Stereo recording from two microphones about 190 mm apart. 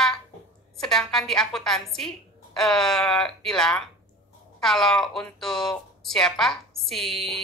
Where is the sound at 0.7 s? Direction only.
Centre (ahead or behind).